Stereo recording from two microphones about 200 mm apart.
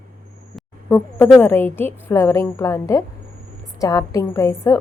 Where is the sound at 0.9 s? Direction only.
10° left (ahead or behind).